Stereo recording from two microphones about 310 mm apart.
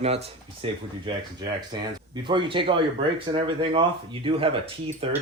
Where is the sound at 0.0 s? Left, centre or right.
Centre.